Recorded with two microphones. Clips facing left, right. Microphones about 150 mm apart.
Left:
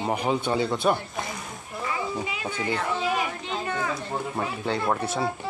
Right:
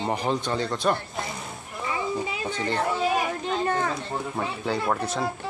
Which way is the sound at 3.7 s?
40° right (ahead or behind).